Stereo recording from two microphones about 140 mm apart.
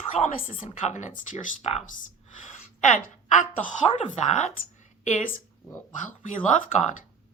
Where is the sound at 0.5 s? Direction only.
55° left (ahead or behind).